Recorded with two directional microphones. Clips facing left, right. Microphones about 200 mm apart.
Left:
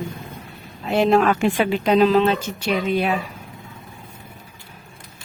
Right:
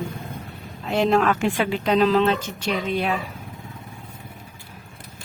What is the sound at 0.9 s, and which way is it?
Speech, 10° left (ahead or behind).